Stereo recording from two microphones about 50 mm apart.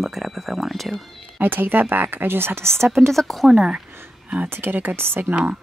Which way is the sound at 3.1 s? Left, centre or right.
Centre.